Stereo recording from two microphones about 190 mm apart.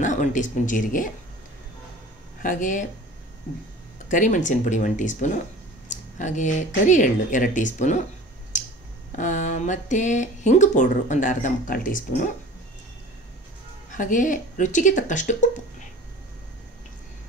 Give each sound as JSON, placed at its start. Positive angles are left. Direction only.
{"t": 0.0, "sound": "speech", "side_deg": 40}
{"t": 2.4, "sound": "speech", "side_deg": 45}
{"t": 4.1, "sound": "speech", "side_deg": 45}
{"t": 9.1, "sound": "speech", "side_deg": 40}
{"t": 13.9, "sound": "speech", "side_deg": 45}